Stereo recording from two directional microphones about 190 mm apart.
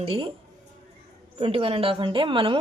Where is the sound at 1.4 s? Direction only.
30° right (ahead or behind).